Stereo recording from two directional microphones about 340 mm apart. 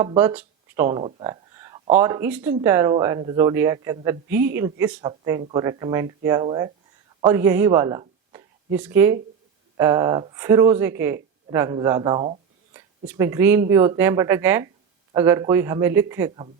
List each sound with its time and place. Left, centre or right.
0.0 s speech: centre